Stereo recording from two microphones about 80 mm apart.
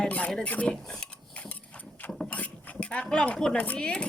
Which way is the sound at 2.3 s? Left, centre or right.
Centre.